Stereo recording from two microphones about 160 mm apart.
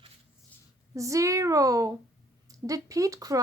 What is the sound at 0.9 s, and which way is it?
A child's voice, 20° right (ahead or behind).